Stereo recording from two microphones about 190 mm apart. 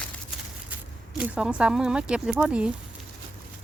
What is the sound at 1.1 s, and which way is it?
Speech, 5° right (ahead or behind).